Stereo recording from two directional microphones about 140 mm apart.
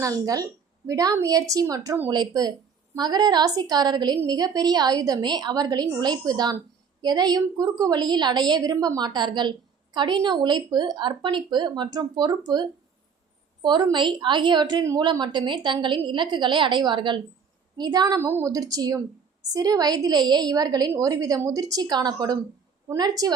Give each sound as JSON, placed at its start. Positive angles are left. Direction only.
{"t": 0.0, "sound": "a woman's voice", "side_deg": -25}
{"t": 13.6, "sound": "a woman's voice", "side_deg": -30}
{"t": 18.2, "sound": "a woman's voice", "side_deg": -20}